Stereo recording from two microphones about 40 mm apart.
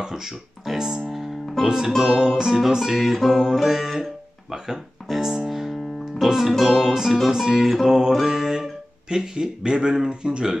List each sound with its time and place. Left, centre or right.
0.0 s speech: centre
1.0 s music: centre
2.0 s speech: centre
5.2 s music: centre
6.2 s speech: centre
7.2 s music: centre
7.8 s speech: centre
8.3 s music: centre
9.1 s speech: centre